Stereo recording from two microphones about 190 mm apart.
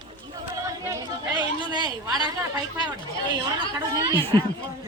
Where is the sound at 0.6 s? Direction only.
15° right (ahead or behind).